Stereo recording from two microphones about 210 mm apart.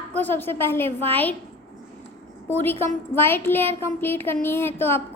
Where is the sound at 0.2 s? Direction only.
10° left (ahead or behind).